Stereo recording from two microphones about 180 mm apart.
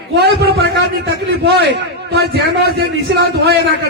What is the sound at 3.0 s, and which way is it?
Speech, 75° right (ahead or behind).